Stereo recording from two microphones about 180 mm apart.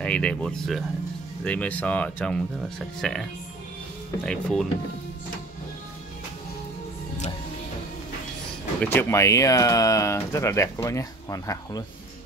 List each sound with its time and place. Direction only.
0.0 s speech: 5° left (ahead or behind)
8.8 s speech: 15° left (ahead or behind)